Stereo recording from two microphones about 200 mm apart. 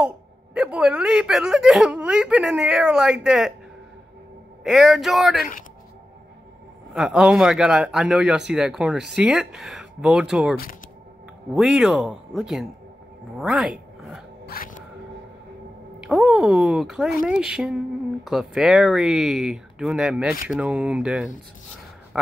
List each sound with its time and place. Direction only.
0.6 s a man's voice: 5° right (ahead or behind)
4.6 s a man's voice: centre (ahead or behind)
6.9 s a man's voice: 5° right (ahead or behind)
14.4 s music: 45° left (ahead or behind)
16.0 s a man's voice: 5° right (ahead or behind)
22.1 s a sound: 5° right (ahead or behind)